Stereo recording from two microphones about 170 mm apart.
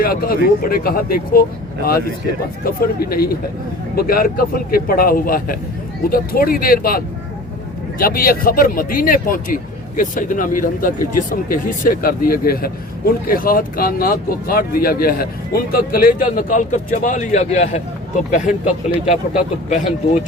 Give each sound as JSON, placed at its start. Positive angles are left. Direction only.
{"t": 0.0, "sound": "speech", "side_deg": 60}